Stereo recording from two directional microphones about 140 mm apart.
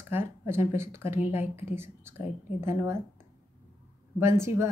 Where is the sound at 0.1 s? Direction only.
15° right (ahead or behind).